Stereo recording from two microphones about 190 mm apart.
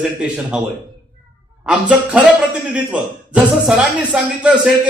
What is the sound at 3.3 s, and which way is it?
A man's voice, 5° right (ahead or behind).